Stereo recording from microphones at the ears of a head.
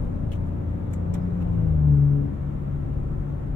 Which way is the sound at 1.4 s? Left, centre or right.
Left.